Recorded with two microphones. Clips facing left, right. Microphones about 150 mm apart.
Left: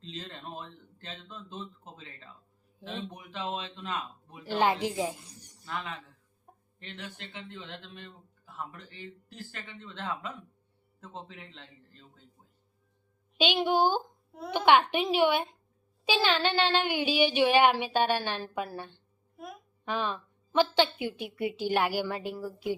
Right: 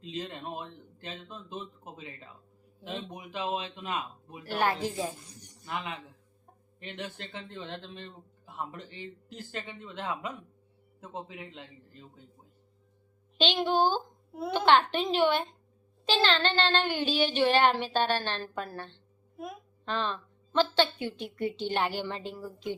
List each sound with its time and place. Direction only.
0.0 s speech: 10° right (ahead or behind)
4.5 s speech: 15° left (ahead or behind)
5.6 s speech: 15° right (ahead or behind)
7.2 s speech: 35° right (ahead or behind)
8.4 s speech: 20° right (ahead or behind)
13.3 s speech: 10° left (ahead or behind)